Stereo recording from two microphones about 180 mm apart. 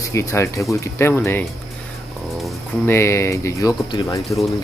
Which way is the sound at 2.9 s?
15° left (ahead or behind).